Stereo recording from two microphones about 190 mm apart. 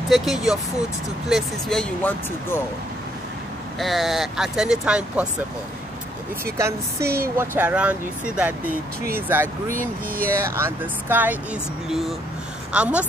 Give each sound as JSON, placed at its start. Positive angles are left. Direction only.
{"t": 0.1, "sound": "speech", "side_deg": 0}
{"t": 3.8, "sound": "speech", "side_deg": 0}
{"t": 6.6, "sound": "speech", "side_deg": -15}
{"t": 9.7, "sound": "speech", "side_deg": -45}
{"t": 10.4, "sound": "speech", "side_deg": -15}